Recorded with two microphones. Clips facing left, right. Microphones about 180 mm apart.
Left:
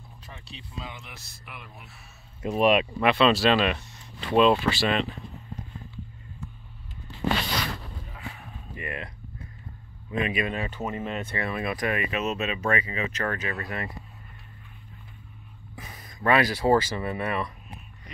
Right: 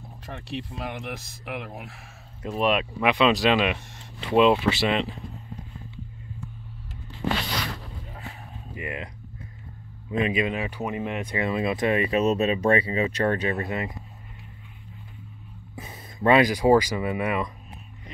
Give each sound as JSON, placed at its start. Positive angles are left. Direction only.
{"t": 0.3, "sound": "speech", "side_deg": -65}
{"t": 2.4, "sound": "speech", "side_deg": 5}
{"t": 3.0, "sound": "speech", "side_deg": -15}
{"t": 8.7, "sound": "speech", "side_deg": -20}
{"t": 10.1, "sound": "speech", "side_deg": -25}
{"t": 15.7, "sound": "speech", "side_deg": -25}